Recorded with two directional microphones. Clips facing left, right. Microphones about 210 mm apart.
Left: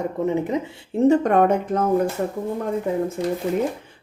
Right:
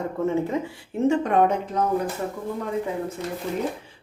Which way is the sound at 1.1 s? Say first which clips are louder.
Left 4 dB; 50° left (ahead or behind).